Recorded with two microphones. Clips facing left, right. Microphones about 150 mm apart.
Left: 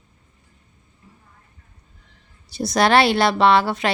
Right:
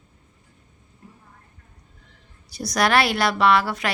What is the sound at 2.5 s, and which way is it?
A woman's voice, 25° left (ahead or behind).